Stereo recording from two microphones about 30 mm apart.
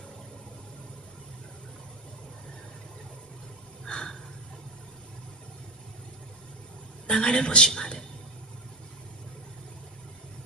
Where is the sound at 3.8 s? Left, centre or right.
Left.